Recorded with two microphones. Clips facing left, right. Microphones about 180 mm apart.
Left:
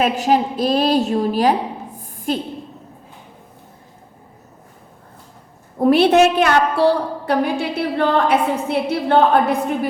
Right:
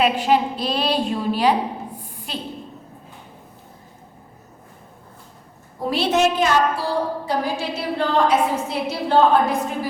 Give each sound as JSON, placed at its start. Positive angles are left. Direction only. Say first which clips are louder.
{"t": 0.0, "sound": "a woman's voice", "louder": "left 1 dB", "side_deg": 45}
{"t": 2.0, "sound": "a sound", "louder": "left 10 dB", "side_deg": 50}
{"t": 5.8, "sound": "a woman's voice", "louder": "left 7 dB", "side_deg": 60}